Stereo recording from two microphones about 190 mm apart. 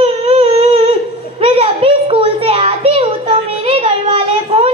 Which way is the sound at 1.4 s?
30° right (ahead or behind).